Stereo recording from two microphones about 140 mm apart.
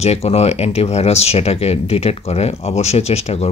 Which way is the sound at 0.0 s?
50° left (ahead or behind).